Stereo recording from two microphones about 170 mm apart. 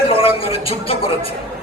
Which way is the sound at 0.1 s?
35° left (ahead or behind).